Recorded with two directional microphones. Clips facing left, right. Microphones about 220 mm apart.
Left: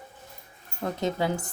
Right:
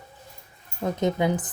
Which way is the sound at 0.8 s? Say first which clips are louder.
Right 4 dB; 20° right (ahead or behind).